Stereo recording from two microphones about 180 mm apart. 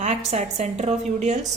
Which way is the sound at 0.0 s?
40° right (ahead or behind).